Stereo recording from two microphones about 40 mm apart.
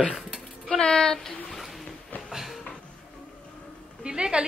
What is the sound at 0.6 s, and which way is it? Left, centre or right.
Speech, left.